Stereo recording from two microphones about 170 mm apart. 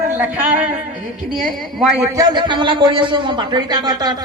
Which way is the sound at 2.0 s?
20° right (ahead or behind).